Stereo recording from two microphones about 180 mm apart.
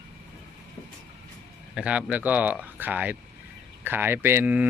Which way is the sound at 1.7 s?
5° right (ahead or behind).